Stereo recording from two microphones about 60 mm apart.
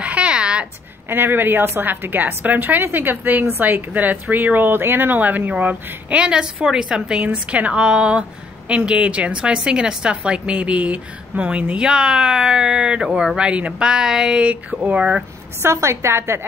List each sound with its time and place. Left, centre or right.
0.0 s a sound: right
1.0 s a woman's voice: right; by 14.5 s centre
14.5 s a woman's voice: right
15.6 s a woman's voice: right